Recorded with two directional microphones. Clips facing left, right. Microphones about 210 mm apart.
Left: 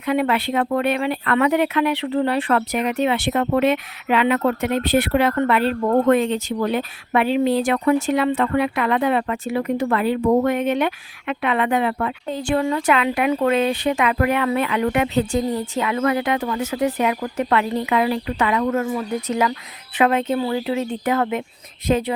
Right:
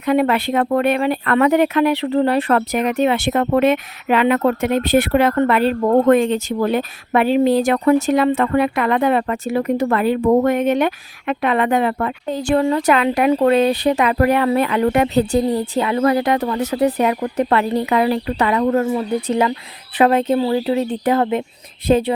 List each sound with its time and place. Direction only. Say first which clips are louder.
0.0 s speech: right 4 dB; 45° right (ahead or behind)